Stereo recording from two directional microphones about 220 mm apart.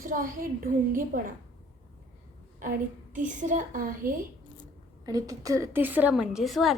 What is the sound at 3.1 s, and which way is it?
Speech, 35° right (ahead or behind).